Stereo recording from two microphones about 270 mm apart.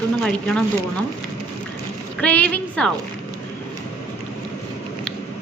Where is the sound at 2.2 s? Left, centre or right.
Centre.